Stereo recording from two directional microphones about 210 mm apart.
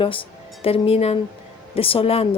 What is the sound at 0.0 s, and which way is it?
Speech, 25° left (ahead or behind).